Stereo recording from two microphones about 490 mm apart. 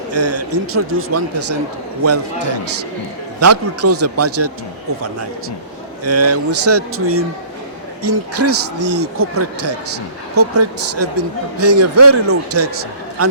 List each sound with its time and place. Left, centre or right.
0.1 s speech: right
3.4 s speech: right
6.1 s speech: right